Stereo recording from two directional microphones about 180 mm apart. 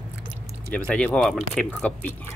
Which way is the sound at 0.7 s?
5° left (ahead or behind).